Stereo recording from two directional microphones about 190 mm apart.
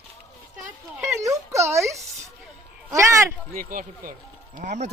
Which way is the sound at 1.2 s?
15° right (ahead or behind).